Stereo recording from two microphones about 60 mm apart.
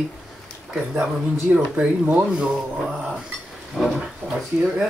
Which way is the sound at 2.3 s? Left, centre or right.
Centre.